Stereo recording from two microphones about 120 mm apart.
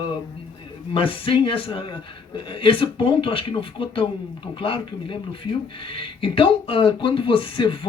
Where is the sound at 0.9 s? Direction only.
50° left (ahead or behind).